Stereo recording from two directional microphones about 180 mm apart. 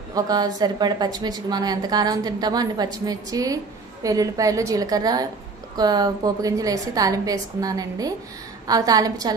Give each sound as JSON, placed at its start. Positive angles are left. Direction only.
{"t": 0.1, "sound": "a woman's voice", "side_deg": -20}